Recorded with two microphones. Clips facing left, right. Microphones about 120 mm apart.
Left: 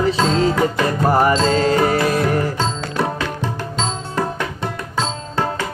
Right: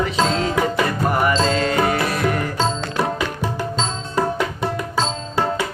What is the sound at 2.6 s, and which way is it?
Music, 10° right (ahead or behind).